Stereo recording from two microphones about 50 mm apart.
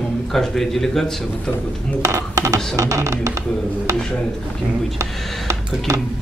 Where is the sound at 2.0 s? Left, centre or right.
Right.